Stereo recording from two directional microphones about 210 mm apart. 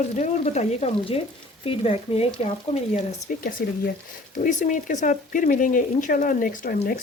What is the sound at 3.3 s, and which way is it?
Speech, 40° left (ahead or behind).